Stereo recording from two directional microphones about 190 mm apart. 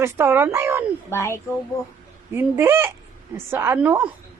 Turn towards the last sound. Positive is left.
turn(degrees=-10)  # may be behind; listen again after turning